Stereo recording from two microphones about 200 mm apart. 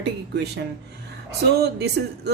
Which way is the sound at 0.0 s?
55° right (ahead or behind).